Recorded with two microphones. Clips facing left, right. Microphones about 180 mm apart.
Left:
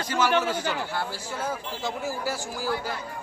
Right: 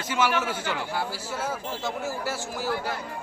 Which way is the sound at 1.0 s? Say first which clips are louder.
Right 1 dB; 5° right (ahead or behind).